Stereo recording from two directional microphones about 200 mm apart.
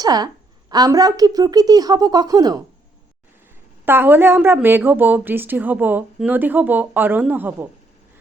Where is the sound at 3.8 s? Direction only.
10° right (ahead or behind).